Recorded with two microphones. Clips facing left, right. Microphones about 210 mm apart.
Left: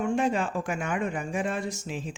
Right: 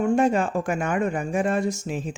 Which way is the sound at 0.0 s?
45° right (ahead or behind).